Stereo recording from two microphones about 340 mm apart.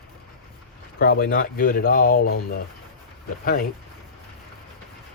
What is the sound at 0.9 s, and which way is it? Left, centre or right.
Speech, left.